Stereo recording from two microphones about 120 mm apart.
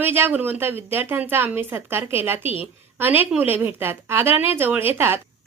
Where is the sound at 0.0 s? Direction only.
20° right (ahead or behind).